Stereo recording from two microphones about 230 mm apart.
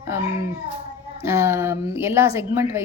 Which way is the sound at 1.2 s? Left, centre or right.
Centre.